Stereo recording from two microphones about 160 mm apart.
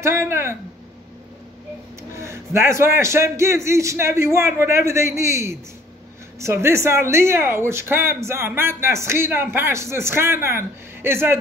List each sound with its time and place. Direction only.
0.0 s speech: 15° right (ahead or behind)
2.1 s speech: 15° right (ahead or behind)